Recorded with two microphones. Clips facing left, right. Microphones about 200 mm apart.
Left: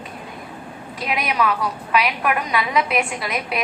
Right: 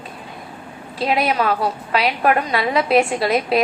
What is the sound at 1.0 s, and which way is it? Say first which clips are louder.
A woman's voice: right 4 dB; 30° right (ahead or behind).